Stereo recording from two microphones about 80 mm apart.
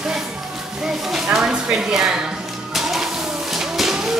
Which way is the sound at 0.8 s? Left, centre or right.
Centre.